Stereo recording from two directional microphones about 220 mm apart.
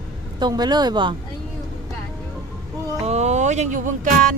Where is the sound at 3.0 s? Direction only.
30° right (ahead or behind).